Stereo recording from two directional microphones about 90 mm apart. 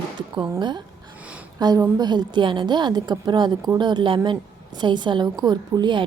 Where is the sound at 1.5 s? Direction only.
45° right (ahead or behind).